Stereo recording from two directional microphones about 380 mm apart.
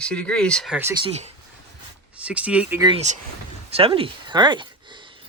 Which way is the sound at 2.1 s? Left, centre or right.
Centre.